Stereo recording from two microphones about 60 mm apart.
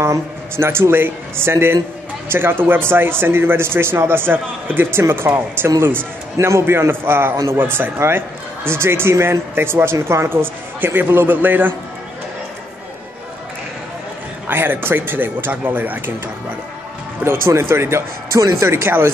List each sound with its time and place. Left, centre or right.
0.0 s speech: right
6.3 s a man's voice: right
6.6 s speech: right
14.5 s speech: right
17.2 s speech: right